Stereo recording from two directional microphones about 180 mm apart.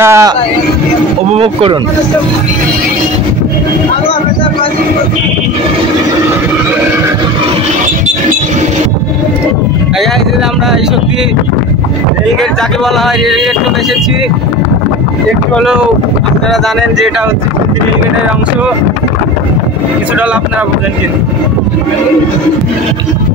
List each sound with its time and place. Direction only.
0.0 s a sound: 15° right (ahead or behind)
1.3 s speech: 30° right (ahead or behind)
15.5 s speech: centre (ahead or behind)